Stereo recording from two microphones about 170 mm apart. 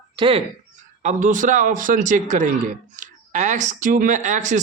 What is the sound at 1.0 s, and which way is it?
A man's voice, 50° right (ahead or behind).